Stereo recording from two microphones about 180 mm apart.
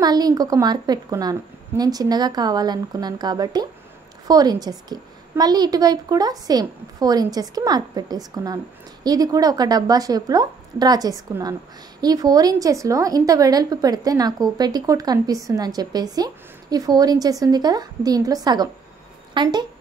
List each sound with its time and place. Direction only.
0.0 s a woman's voice: 20° right (ahead or behind)